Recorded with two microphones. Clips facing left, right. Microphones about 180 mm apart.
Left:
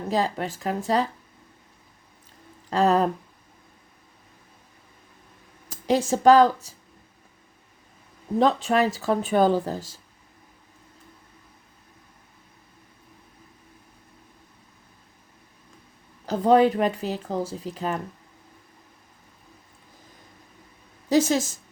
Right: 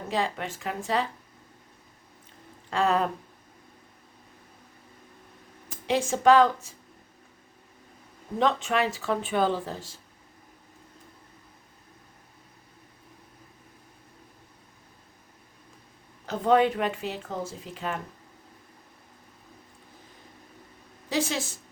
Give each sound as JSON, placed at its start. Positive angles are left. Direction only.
{"t": 0.1, "sound": "speech", "side_deg": 40}
{"t": 2.6, "sound": "a sound", "side_deg": 40}
{"t": 5.6, "sound": "speech", "side_deg": 40}
{"t": 8.4, "sound": "speech", "side_deg": 35}
{"t": 16.2, "sound": "speech", "side_deg": 35}
{"t": 21.1, "sound": "speech", "side_deg": 40}